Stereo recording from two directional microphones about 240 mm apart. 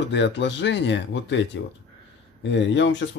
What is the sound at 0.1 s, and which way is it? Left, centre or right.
Speech, left.